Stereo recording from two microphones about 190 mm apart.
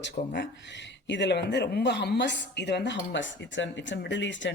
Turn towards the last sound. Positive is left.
turn(degrees=70)  # may be behind; listen again after turning